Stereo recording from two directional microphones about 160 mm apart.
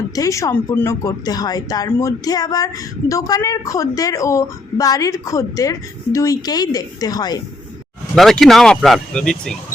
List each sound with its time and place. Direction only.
0.2 s a woman's voice: 20° left (ahead or behind)
8.1 s speech: centre (ahead or behind)